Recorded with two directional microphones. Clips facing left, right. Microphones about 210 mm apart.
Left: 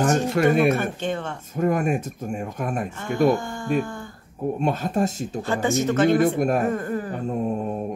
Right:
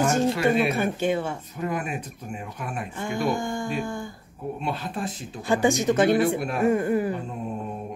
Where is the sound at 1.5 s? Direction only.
45° left (ahead or behind).